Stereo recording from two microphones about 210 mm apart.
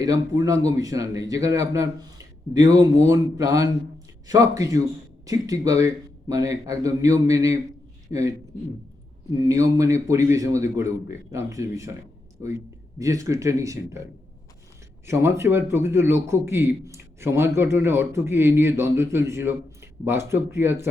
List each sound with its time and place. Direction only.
0.0 s a man's voice: 15° right (ahead or behind)
15.0 s a man's voice: 10° right (ahead or behind)